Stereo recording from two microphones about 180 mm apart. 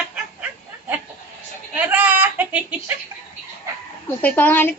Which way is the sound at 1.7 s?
10° right (ahead or behind).